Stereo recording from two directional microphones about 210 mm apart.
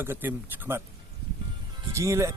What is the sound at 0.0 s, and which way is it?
Speech, 10° right (ahead or behind).